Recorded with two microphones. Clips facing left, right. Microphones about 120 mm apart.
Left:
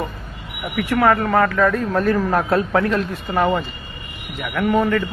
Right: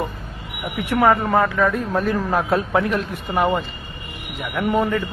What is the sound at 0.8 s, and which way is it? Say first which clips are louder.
Speech: left 1 dB; 20° right (ahead or behind).